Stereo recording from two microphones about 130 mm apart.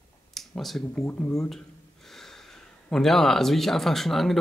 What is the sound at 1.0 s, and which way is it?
Speech, 20° left (ahead or behind).